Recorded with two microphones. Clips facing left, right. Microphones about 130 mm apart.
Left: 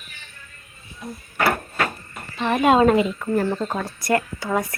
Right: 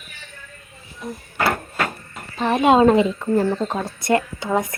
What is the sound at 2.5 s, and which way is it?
Speech, 20° right (ahead or behind).